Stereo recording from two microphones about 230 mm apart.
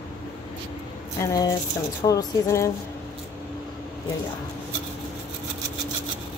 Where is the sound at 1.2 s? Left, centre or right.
Centre.